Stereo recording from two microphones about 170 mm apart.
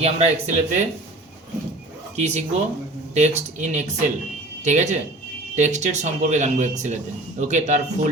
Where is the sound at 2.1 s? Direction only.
45° right (ahead or behind).